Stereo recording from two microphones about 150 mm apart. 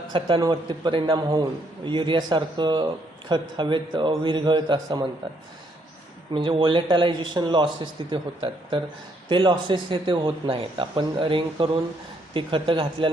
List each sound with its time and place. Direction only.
0.1 s a man's voice: 30° right (ahead or behind)
6.3 s a man's voice: 35° right (ahead or behind)